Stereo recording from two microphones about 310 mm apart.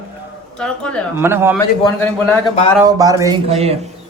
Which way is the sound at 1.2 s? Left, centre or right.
Centre.